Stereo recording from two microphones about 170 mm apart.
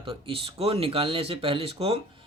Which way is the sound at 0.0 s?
30° right (ahead or behind).